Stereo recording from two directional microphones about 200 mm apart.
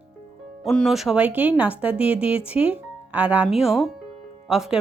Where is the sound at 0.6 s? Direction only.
Centre (ahead or behind).